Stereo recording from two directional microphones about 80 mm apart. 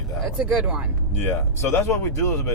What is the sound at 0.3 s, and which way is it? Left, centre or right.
Speech, centre.